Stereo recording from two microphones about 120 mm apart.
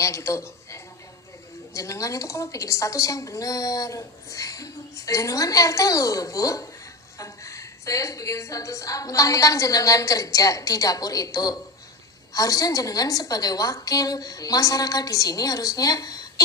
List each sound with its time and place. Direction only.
0.0 s a woman's voice: 25° left (ahead or behind)